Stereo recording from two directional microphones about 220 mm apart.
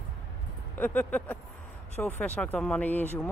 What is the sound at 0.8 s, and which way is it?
Speech, 10° left (ahead or behind).